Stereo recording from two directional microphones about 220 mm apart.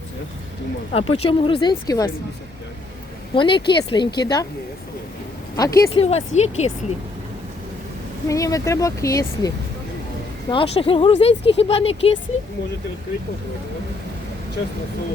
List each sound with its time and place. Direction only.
0.9 s speech: 25° left (ahead or behind)
3.3 s speech: 20° left (ahead or behind)
5.5 s speech: 15° left (ahead or behind)
5.9 s speech: 30° left (ahead or behind)
8.3 s speech: 15° left (ahead or behind)
10.5 s speech: 25° left (ahead or behind)